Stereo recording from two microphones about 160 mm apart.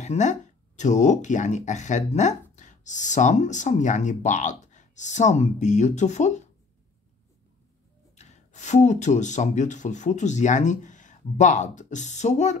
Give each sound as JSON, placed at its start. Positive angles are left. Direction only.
{"t": 0.0, "sound": "speech", "side_deg": 45}
{"t": 8.2, "sound": "speech", "side_deg": 45}